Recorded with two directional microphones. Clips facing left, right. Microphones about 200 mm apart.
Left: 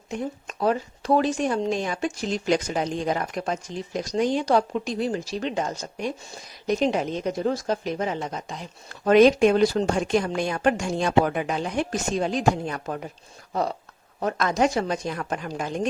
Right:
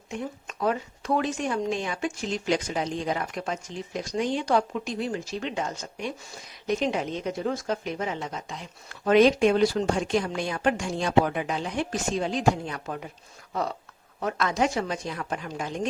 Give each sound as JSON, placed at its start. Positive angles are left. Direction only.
{"t": 0.4, "sound": "a woman's voice", "side_deg": 35}